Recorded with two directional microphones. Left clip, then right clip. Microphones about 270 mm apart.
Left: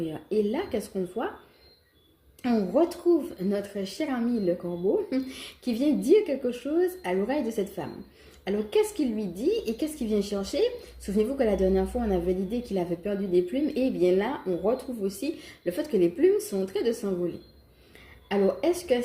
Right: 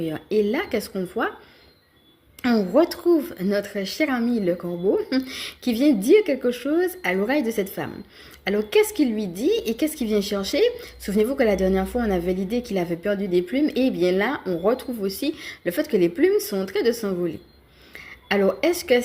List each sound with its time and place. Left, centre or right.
0.0 s a woman's voice: right
2.4 s a woman's voice: right